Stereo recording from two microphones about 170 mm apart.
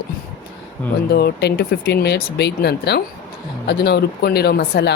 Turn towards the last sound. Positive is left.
turn(degrees=75)  # may be behind; listen again after turning